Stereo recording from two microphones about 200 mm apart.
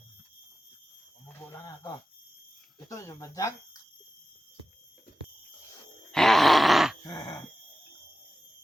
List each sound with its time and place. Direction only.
2.9 s speech: 15° left (ahead or behind)
6.1 s groan: centre (ahead or behind)
7.1 s a sound: 20° left (ahead or behind)